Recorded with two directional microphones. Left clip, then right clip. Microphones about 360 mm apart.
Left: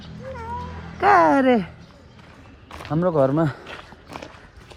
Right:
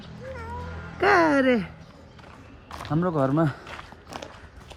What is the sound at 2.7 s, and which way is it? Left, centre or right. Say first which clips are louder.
Walk: left 6 dB; centre.